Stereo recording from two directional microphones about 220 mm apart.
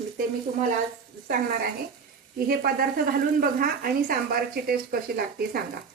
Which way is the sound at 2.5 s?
40° right (ahead or behind).